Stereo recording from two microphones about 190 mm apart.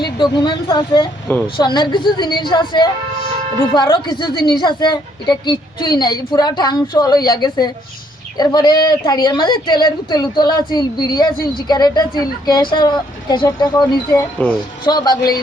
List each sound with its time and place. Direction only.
0.0 s a woman's voice: 25° left (ahead or behind)